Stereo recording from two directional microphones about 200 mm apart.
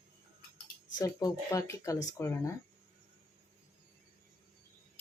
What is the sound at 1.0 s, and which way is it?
Speech, 15° left (ahead or behind).